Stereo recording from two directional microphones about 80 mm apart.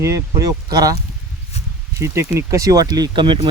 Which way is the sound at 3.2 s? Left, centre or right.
Right.